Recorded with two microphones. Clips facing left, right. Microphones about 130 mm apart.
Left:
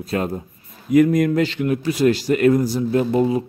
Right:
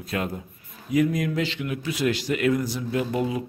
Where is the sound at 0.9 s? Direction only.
55° left (ahead or behind).